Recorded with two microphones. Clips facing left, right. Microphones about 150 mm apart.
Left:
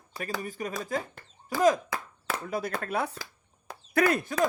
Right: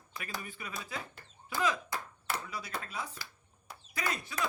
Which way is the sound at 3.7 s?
60° left (ahead or behind).